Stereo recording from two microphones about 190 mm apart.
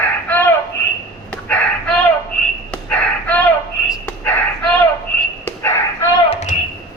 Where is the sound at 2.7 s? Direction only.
5° left (ahead or behind).